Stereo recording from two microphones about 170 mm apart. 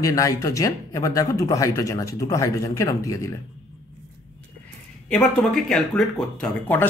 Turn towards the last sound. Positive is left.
turn(degrees=5)  # may be behind; listen again after turning